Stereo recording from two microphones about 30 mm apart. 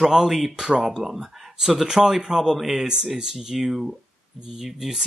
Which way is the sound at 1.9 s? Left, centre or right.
Right.